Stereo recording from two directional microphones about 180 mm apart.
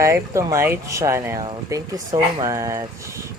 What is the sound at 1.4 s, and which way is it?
Speech, 25° right (ahead or behind).